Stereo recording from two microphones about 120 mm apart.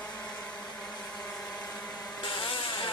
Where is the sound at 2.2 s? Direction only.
45° left (ahead or behind).